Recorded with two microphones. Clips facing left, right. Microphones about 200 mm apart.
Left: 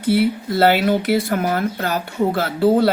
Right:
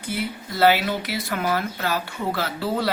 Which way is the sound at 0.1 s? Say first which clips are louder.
Left 12 dB; 60° left (ahead or behind).